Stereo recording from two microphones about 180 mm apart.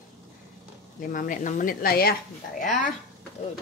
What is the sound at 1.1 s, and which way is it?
Speech, 50° left (ahead or behind).